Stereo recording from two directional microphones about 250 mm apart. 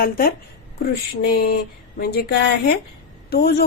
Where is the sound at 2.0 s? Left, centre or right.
Left.